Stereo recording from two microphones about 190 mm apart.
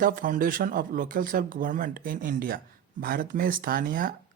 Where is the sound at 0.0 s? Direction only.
45° right (ahead or behind).